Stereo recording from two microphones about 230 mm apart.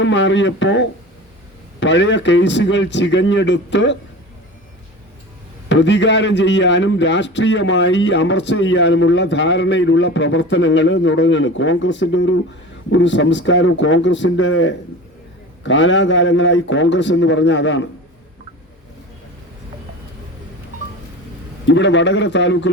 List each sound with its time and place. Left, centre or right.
0.0 s a man's voice: left
5.6 s a man's voice: left
21.7 s a man's voice: left